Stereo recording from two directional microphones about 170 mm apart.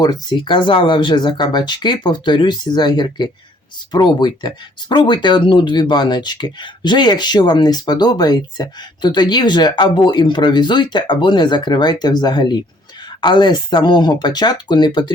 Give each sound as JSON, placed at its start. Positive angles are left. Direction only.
{"t": 0.0, "sound": "speech", "side_deg": 25}